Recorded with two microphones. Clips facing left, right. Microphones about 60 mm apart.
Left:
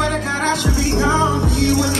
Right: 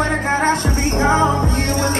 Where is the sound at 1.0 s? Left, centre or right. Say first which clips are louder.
Right 2 dB; right.